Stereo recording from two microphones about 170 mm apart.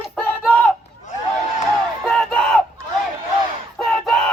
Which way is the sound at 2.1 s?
5° left (ahead or behind).